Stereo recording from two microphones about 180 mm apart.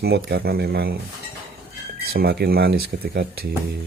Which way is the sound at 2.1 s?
60° right (ahead or behind).